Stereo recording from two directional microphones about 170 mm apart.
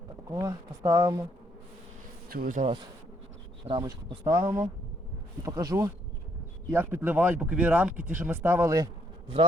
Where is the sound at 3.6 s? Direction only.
30° right (ahead or behind).